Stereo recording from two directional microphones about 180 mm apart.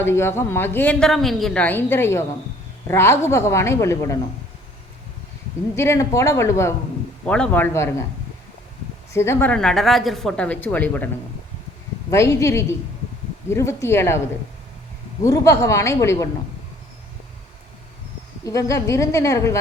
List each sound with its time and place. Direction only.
0.0 s speech: 15° left (ahead or behind)
5.7 s speech: 15° left (ahead or behind)
7.3 s speech: 5° left (ahead or behind)
9.1 s speech: 15° left (ahead or behind)
12.1 s speech: 15° left (ahead or behind)
15.2 s speech: 15° left (ahead or behind)
18.4 s speech: 15° left (ahead or behind)